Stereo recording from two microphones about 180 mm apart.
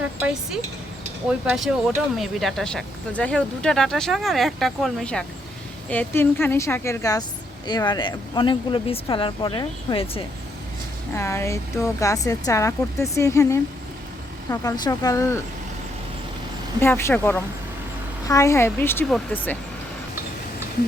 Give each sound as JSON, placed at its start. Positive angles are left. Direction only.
{"t": 1.3, "sound": "speech", "side_deg": -5}
{"t": 11.1, "sound": "speech", "side_deg": 15}
{"t": 16.8, "sound": "speech", "side_deg": 15}